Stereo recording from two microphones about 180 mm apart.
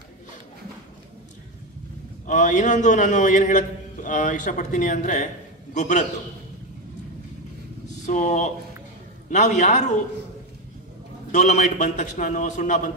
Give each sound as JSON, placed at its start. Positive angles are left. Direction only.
{"t": 2.2, "sound": "a man's voice", "side_deg": 45}
{"t": 8.0, "sound": "a man's voice", "side_deg": 40}
{"t": 11.3, "sound": "a man's voice", "side_deg": 40}